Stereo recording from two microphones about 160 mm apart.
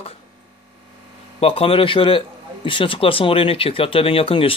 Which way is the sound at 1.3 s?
35° left (ahead or behind).